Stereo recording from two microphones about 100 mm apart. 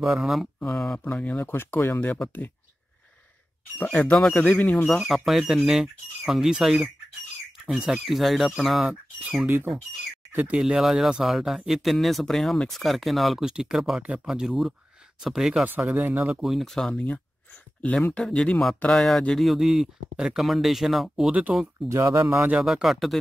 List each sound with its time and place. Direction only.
0.1 s speech: 5° right (ahead or behind)
0.6 s speech: 10° left (ahead or behind)
3.9 s speech: 10° left (ahead or behind)
4.6 s speech: 20° left (ahead or behind)
4.8 s speech: centre (ahead or behind)
10.3 s speech: 15° right (ahead or behind)
10.6 s speech: 5° right (ahead or behind)
15.9 s speech: 20° right (ahead or behind)
16.4 s speech: centre (ahead or behind)
18.1 s speech: 10° left (ahead or behind)
21.3 s speech: 15° right (ahead or behind)
21.8 s speech: 30° right (ahead or behind)
22.5 s speech: 5° right (ahead or behind)